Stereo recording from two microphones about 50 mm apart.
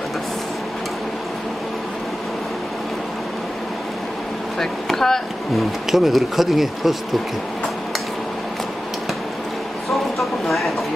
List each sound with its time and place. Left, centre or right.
4.6 s speech: centre
5.9 s speech: centre
9.8 s a sound: centre